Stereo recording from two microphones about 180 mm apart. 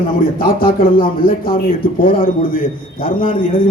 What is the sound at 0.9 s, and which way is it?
A man's voice, 50° left (ahead or behind).